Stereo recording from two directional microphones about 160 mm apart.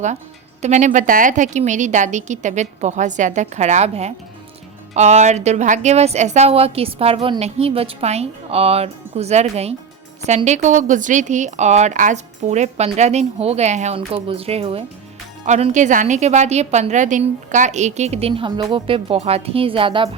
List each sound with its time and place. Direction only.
0.6 s a woman's voice: 50° right (ahead or behind); by 20.1 s 35° right (ahead or behind)